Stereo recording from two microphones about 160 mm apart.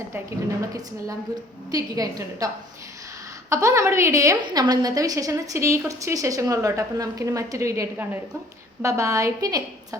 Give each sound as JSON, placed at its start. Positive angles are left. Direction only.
{"t": 1.7, "sound": "a woman's voice", "side_deg": -20}
{"t": 3.5, "sound": "a woman's voice", "side_deg": -20}